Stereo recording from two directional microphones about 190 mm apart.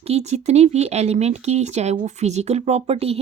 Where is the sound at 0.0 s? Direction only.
35° right (ahead or behind).